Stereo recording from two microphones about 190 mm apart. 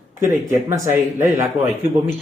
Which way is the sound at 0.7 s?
10° right (ahead or behind).